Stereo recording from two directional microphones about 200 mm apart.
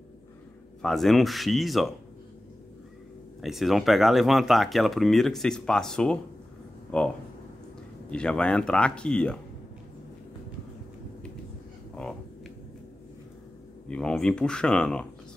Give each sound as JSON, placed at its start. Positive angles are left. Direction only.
{"t": 0.8, "sound": "speech", "side_deg": 0}
{"t": 3.3, "sound": "speech", "side_deg": 0}
{"t": 8.1, "sound": "speech", "side_deg": 5}
{"t": 11.9, "sound": "a sound", "side_deg": 5}
{"t": 13.8, "sound": "speech", "side_deg": 5}